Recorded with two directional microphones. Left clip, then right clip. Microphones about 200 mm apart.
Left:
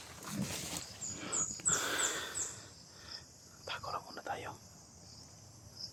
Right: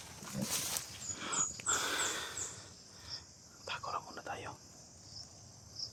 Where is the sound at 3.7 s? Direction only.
Centre (ahead or behind).